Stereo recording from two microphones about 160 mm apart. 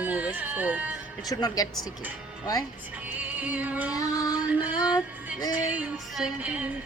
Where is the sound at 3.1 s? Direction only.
10° right (ahead or behind).